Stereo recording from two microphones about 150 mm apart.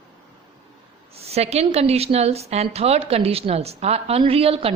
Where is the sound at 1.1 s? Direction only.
45° right (ahead or behind).